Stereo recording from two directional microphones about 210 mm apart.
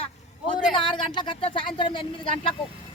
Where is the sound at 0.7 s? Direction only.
20° left (ahead or behind).